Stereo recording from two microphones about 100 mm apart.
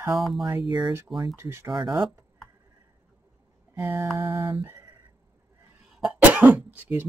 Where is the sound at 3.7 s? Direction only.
25° right (ahead or behind).